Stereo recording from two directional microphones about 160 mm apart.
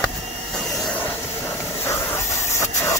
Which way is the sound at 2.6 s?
20° left (ahead or behind).